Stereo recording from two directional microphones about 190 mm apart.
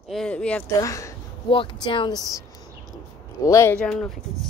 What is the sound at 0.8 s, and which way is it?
Speech, 15° left (ahead or behind).